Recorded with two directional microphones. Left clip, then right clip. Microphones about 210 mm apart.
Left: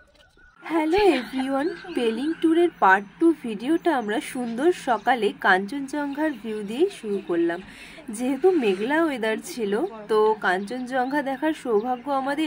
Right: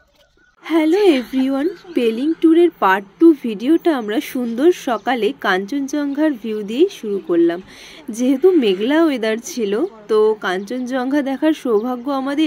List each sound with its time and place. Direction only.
0.7 s speech: 15° right (ahead or behind)